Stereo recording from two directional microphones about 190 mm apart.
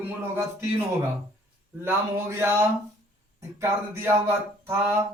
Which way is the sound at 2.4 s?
15° right (ahead or behind).